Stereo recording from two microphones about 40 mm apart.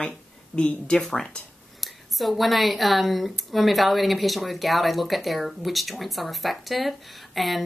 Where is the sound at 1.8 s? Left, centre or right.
Centre.